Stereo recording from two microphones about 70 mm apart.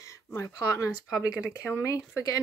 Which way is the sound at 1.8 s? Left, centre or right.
Left.